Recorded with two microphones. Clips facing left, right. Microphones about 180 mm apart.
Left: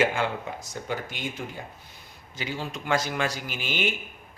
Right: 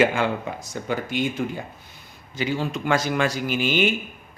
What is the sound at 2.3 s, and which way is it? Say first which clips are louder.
Speech: right 8 dB; 65° right (ahead or behind).